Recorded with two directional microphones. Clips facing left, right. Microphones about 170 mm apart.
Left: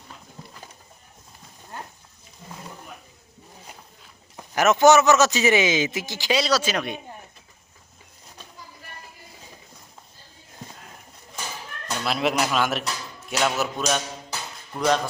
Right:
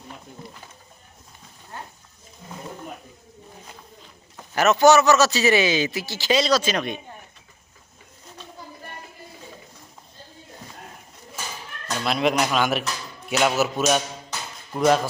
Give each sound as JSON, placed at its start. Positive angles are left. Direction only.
{"t": 4.5, "sound": "a man's voice", "side_deg": 15}
{"t": 11.9, "sound": "speech", "side_deg": 5}
{"t": 13.2, "sound": "music", "side_deg": -5}
{"t": 14.7, "sound": "speech", "side_deg": -5}